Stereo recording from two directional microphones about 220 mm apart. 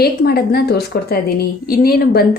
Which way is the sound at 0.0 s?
45° left (ahead or behind).